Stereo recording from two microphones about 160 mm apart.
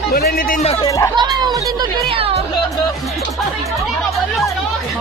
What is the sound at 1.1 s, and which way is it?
Children playing, 25° right (ahead or behind).